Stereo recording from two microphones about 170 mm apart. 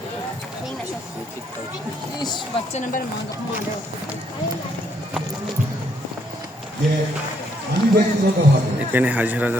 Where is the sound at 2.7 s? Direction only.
45° left (ahead or behind).